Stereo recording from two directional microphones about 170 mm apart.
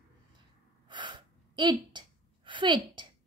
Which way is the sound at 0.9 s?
25° right (ahead or behind).